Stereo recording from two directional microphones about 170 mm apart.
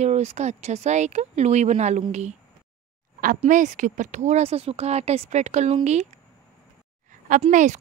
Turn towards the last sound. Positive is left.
turn(degrees=-45)  # may be behind; listen again after turning